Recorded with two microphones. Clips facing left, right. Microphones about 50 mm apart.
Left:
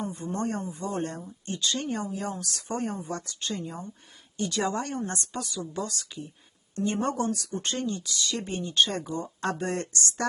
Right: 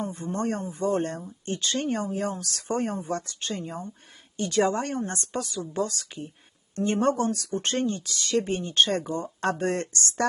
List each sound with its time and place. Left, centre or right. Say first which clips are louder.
0.0 s speech: right 2 dB; right